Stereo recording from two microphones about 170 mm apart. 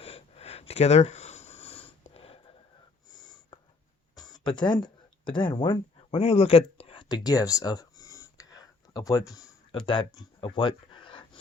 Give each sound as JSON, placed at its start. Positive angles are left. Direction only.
{"t": 0.0, "sound": "sniff", "side_deg": 35}
{"t": 3.5, "sound": "cough", "side_deg": 30}
{"t": 4.1, "sound": "a sound", "side_deg": 25}